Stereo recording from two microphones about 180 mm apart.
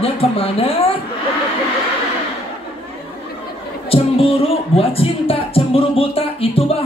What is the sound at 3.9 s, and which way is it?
Speech, 30° left (ahead or behind).